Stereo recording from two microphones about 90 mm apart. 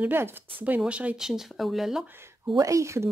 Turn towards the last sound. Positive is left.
turn(degrees=-35)  # may be behind; listen again after turning